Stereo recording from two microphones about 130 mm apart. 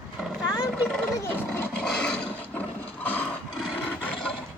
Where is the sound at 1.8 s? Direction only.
5° left (ahead or behind).